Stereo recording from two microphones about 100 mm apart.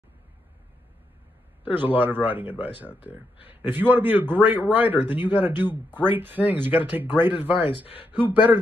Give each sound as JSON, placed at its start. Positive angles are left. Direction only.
{"t": 1.6, "sound": "speech", "side_deg": -20}